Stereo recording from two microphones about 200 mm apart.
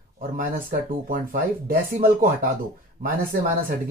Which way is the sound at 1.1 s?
45° right (ahead or behind).